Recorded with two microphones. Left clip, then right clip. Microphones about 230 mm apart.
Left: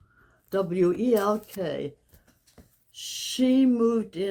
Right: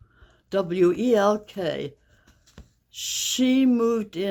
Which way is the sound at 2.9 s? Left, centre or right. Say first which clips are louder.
Right 4 dB; right.